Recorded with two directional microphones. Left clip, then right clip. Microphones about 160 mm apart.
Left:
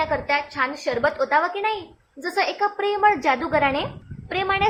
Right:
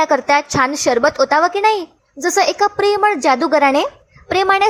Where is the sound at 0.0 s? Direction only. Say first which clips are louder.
Right 9 dB; 50° right (ahead or behind).